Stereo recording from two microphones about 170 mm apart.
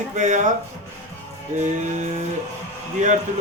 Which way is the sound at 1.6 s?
45° right (ahead or behind).